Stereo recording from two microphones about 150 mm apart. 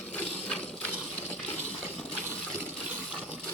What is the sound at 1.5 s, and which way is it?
Water, 10° left (ahead or behind).